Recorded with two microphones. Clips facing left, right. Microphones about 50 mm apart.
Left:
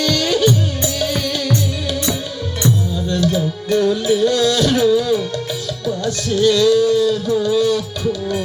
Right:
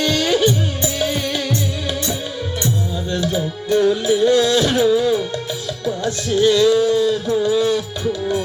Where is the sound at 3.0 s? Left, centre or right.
Right.